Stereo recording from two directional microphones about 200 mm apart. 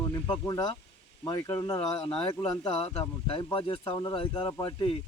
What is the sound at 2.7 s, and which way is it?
Speech, 30° left (ahead or behind).